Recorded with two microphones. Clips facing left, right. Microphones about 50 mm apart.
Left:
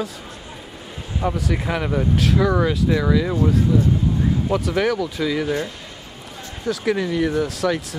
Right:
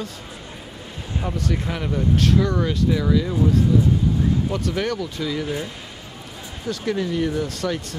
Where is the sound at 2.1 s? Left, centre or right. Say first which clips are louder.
Left 1 dB; centre.